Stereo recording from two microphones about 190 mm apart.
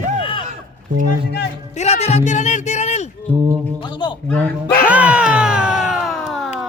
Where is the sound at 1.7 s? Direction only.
35° left (ahead or behind).